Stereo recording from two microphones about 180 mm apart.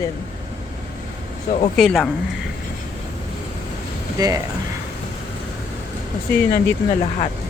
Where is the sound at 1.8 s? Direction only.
Centre (ahead or behind).